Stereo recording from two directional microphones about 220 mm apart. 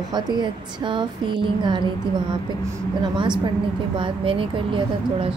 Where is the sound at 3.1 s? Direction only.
20° right (ahead or behind).